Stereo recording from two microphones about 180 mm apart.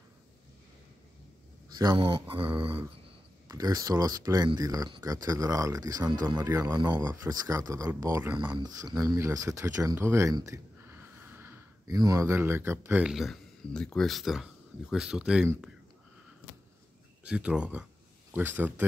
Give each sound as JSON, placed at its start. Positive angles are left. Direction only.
{"t": 2.0, "sound": "speech", "side_deg": -30}
{"t": 17.2, "sound": "speech", "side_deg": -5}